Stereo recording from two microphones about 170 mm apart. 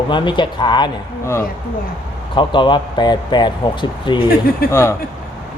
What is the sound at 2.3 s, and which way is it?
A man's voice, 30° left (ahead or behind).